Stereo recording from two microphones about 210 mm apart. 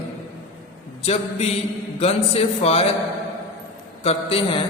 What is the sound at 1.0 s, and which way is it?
A man's voice, 30° left (ahead or behind).